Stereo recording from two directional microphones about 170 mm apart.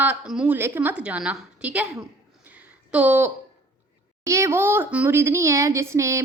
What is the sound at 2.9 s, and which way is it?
Speech, 10° right (ahead or behind).